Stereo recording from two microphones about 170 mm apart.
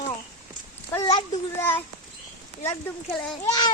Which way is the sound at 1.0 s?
20° left (ahead or behind).